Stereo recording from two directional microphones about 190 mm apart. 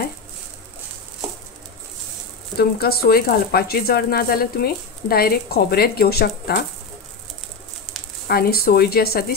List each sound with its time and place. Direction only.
2.5 s speech: 55° left (ahead or behind)
8.3 s speech: 55° left (ahead or behind)